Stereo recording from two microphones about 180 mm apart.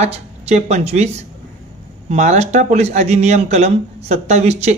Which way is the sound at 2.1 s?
40° right (ahead or behind).